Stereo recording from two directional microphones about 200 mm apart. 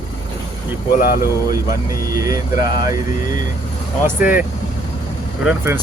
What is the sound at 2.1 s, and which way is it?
Speech, 15° right (ahead or behind).